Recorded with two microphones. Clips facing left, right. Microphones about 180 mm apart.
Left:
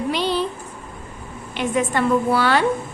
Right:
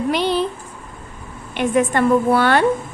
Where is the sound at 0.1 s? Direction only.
55° right (ahead or behind).